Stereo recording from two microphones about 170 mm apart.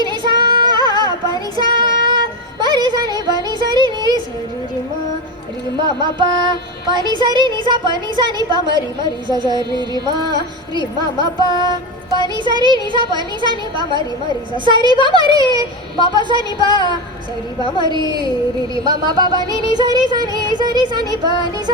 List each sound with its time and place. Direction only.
0.1 s female singing: 25° right (ahead or behind)
1.5 s child singing: 30° right (ahead or behind)
3.7 s a sound: 25° right (ahead or behind)
5.8 s music: 25° right (ahead or behind)
11.3 s a woman's voice: 25° left (ahead or behind)
12.5 s music: 25° right (ahead or behind)
16.6 s a woman's voice: 25° left (ahead or behind)
17.8 s music: 25° right (ahead or behind)